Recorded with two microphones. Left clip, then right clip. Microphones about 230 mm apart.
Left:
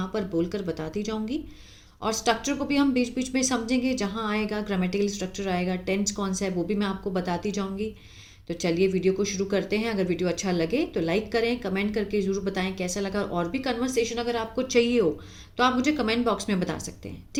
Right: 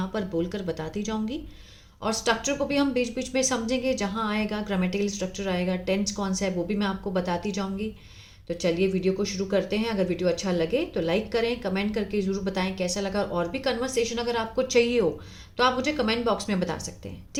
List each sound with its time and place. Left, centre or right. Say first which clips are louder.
0.0 s speech: left 1 dB; centre